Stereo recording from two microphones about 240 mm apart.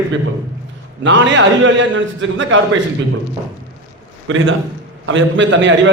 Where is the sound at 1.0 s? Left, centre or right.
Right.